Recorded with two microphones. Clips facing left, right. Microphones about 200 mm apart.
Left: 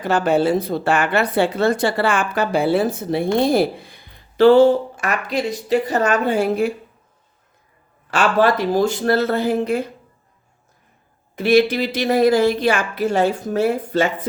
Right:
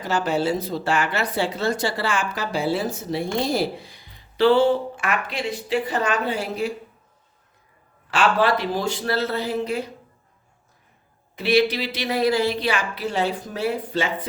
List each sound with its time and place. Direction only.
0.0 s a woman's voice: 55° left (ahead or behind)
8.1 s a woman's voice: 45° left (ahead or behind)
11.3 s a woman's voice: 50° left (ahead or behind)